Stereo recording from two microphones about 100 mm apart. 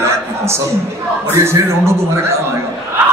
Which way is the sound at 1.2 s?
25° right (ahead or behind).